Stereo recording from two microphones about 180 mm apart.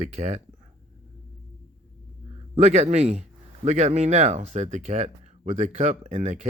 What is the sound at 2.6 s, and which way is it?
A man's voice, 40° right (ahead or behind).